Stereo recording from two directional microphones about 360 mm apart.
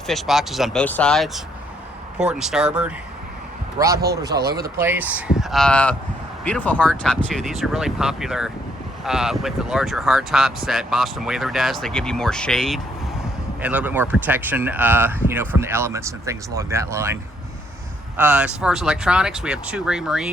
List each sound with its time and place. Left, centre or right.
0.1 s speech: centre
4.3 s speech: right
4.8 s speech: centre
18.2 s speech: centre